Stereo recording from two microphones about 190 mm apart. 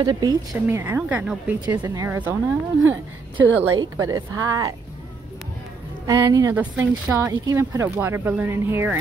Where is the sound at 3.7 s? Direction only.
20° right (ahead or behind).